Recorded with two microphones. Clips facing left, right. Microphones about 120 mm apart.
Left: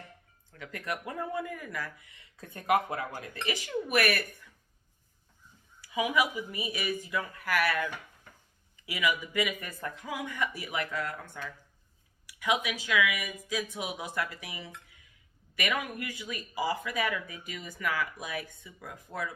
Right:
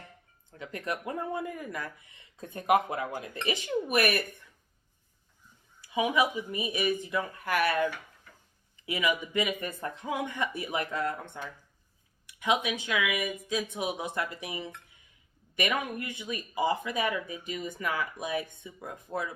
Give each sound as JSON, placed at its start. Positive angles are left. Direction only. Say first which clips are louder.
{"t": 0.6, "sound": "speech", "louder": "right 2 dB", "side_deg": -25}
{"t": 5.8, "sound": "speech", "louder": "right 2 dB", "side_deg": -25}
{"t": 12.2, "sound": "a sound", "louder": "right 2 dB", "side_deg": -25}
{"t": 12.6, "sound": "speech", "louder": "left 1 dB", "side_deg": -25}